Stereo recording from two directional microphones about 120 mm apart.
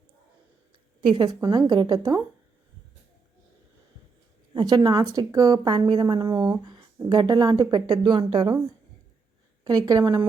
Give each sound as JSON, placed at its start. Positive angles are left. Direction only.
{"t": 1.0, "sound": "speech", "side_deg": -40}
{"t": 4.5, "sound": "speech", "side_deg": -35}
{"t": 9.6, "sound": "speech", "side_deg": -35}